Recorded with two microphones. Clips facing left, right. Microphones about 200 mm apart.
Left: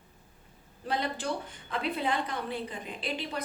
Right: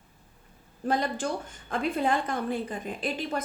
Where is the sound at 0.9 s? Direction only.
45° right (ahead or behind).